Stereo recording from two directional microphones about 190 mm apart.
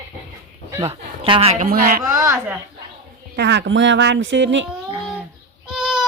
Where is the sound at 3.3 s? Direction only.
65° right (ahead or behind).